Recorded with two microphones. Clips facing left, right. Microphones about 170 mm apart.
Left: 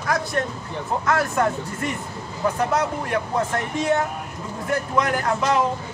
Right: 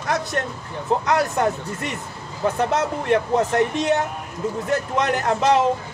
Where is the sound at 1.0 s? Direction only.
20° right (ahead or behind).